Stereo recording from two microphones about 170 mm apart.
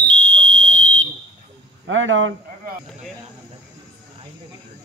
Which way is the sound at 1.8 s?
90° right.